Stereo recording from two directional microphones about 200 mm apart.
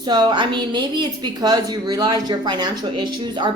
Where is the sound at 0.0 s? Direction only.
20° right (ahead or behind).